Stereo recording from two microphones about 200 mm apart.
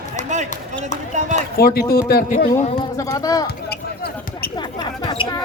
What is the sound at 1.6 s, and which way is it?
Speech, 50° left (ahead or behind).